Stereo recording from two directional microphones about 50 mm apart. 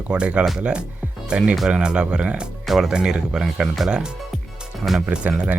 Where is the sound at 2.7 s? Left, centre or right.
Centre.